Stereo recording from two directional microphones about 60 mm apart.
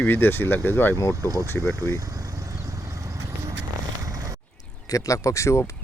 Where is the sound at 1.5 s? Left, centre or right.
Left.